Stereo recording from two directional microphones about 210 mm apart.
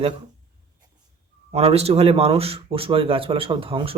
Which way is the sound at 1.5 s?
30° right (ahead or behind).